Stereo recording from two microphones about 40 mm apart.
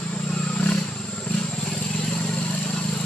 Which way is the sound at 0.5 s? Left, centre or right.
Left.